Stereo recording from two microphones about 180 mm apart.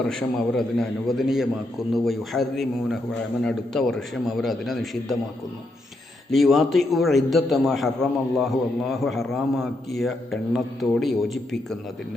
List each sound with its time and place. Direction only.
0.0 s a man's voice: 5° left (ahead or behind)
6.3 s a man's voice: centre (ahead or behind)